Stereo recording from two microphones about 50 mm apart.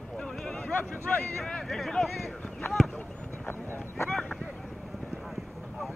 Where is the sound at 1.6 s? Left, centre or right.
Centre.